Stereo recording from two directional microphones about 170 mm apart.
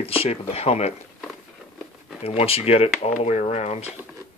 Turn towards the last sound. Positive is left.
turn(degrees=40)  # may be behind; listen again after turning